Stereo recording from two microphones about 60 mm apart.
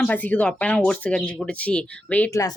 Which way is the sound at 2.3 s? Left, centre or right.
Left.